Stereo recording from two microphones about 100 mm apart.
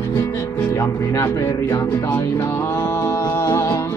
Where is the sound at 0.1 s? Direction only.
25° left (ahead or behind).